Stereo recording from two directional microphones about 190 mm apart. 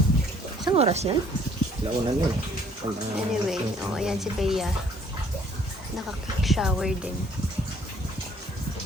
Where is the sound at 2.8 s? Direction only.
25° right (ahead or behind).